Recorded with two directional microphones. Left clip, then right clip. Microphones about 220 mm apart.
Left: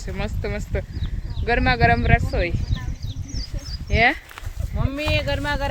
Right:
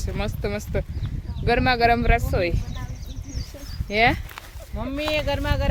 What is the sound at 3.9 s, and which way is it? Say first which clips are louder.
Speech: left 1 dB; 10° right (ahead or behind).